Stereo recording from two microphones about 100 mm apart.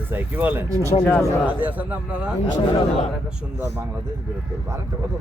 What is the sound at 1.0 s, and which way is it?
Speech, 10° left (ahead or behind).